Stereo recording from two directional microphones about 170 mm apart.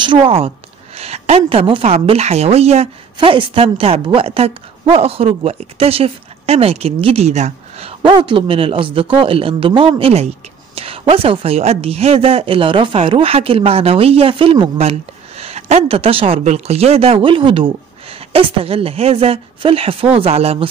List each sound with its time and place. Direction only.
0.0 s speech: 30° right (ahead or behind)